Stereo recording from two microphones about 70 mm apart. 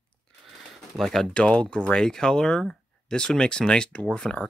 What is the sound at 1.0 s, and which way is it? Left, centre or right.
Speech, centre.